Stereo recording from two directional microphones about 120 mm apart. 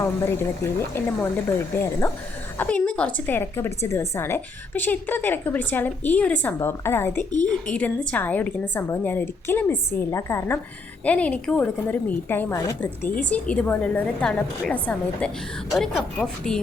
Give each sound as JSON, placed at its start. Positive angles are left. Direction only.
{"t": 0.0, "sound": "a woman's voice", "side_deg": 20}
{"t": 7.4, "sound": "a woman's voice", "side_deg": 10}
{"t": 11.0, "sound": "a woman's voice", "side_deg": 10}